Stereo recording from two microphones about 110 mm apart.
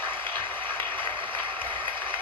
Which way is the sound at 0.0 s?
20° left (ahead or behind).